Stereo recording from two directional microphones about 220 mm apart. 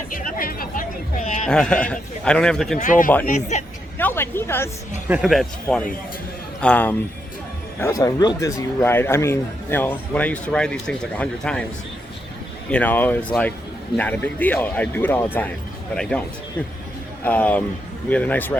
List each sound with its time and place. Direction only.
0.1 s chatter: 40° left (ahead or behind)
1.5 s a man's voice: 5° left (ahead or behind)
2.7 s speech: 35° left (ahead or behind)
3.9 s a sound: 10° left (ahead or behind)
5.0 s a man's voice: 5° right (ahead or behind)
12.7 s a man's voice: 10° left (ahead or behind)
17.2 s speech: 5° left (ahead or behind)